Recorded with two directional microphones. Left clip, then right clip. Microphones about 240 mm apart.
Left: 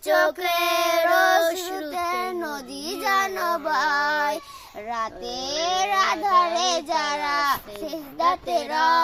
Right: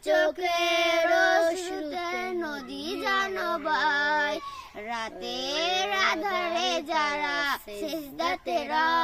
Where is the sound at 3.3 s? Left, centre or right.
Centre.